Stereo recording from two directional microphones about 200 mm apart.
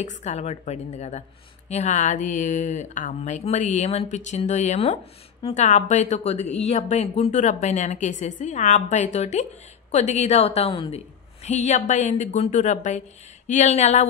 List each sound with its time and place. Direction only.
0.0 s a woman's voice: 35° left (ahead or behind)